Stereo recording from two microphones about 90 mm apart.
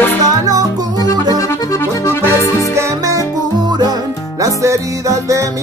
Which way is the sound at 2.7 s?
35° right (ahead or behind).